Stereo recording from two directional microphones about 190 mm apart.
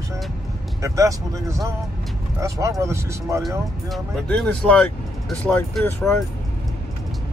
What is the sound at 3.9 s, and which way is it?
Speech, 5° left (ahead or behind).